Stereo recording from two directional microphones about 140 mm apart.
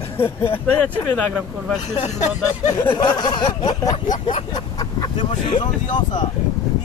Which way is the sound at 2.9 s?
30° left (ahead or behind).